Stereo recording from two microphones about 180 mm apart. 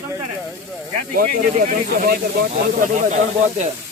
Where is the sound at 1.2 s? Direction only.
50° right (ahead or behind).